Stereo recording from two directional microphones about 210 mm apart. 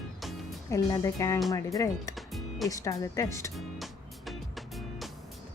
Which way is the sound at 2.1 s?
Centre (ahead or behind).